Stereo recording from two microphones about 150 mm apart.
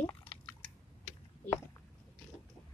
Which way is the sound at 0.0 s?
10° left (ahead or behind).